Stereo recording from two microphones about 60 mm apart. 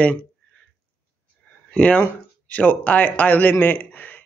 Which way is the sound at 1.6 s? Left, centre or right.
Left.